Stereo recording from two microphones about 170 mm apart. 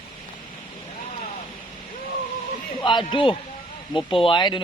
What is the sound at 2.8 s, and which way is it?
Speech, 30° left (ahead or behind).